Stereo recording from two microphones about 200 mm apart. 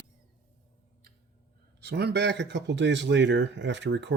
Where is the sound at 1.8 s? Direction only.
55° right (ahead or behind).